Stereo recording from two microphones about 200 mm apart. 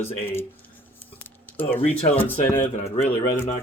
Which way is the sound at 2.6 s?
30° left (ahead or behind).